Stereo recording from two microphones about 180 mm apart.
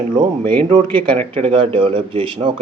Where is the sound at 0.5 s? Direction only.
25° right (ahead or behind).